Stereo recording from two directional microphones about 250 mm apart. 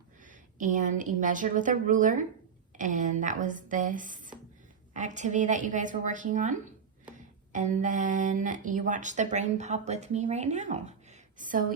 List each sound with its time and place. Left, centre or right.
0.3 s a woman's voice: right